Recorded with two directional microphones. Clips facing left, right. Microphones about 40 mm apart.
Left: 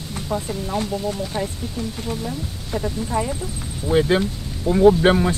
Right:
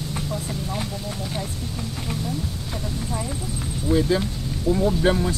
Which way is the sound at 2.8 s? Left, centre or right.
Left.